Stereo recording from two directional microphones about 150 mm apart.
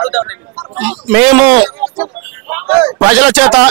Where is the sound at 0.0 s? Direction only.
10° right (ahead or behind).